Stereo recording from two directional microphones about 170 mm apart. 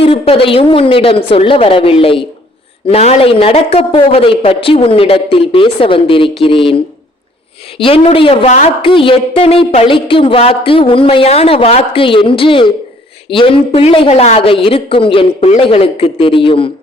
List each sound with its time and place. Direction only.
0.0 s a woman's voice: 35° left (ahead or behind)